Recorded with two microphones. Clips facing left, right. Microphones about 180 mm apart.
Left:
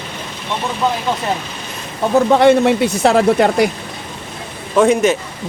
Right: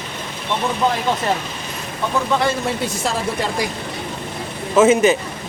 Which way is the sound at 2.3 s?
70° left (ahead or behind).